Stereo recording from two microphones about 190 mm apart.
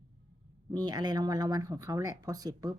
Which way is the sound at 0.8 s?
20° right (ahead or behind).